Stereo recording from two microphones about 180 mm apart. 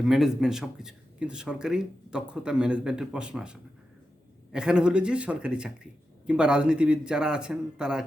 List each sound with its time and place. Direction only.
0.1 s speech: centre (ahead or behind)